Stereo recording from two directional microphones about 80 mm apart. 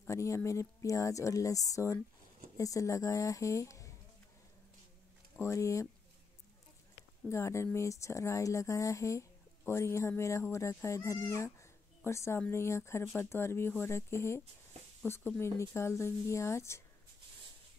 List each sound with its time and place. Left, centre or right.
0.1 s speech: left
5.3 s speech: left
7.2 s a woman's voice: left